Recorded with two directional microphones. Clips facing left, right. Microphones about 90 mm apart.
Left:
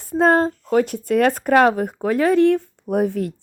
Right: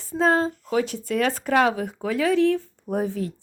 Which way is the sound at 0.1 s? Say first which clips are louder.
Left 5 dB; 55° left (ahead or behind).